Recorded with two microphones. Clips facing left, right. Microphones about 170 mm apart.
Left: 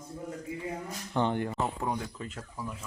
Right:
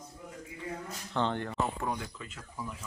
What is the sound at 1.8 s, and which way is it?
Speech, 35° left (ahead or behind).